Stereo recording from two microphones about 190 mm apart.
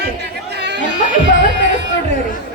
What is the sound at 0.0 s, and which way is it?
Chatter, 60° right (ahead or behind).